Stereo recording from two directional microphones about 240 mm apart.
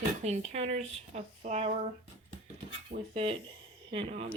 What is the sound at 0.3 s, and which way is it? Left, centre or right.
Speech, right.